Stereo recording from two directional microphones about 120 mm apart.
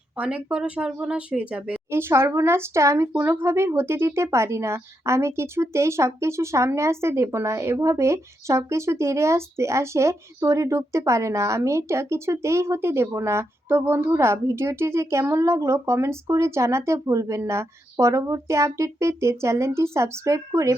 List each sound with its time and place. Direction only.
0.2 s speech: 10° right (ahead or behind); by 3.1 s 25° right (ahead or behind)
3.1 s speech: 15° right (ahead or behind)